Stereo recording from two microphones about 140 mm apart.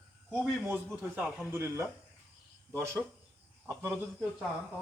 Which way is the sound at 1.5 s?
20° right (ahead or behind).